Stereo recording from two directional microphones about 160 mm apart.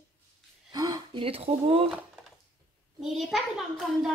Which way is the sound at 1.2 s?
35° right (ahead or behind).